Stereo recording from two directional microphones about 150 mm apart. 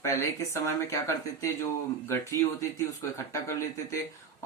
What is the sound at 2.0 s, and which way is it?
Speech, 20° left (ahead or behind).